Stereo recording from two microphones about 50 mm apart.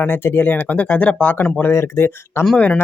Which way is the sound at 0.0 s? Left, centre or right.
Left.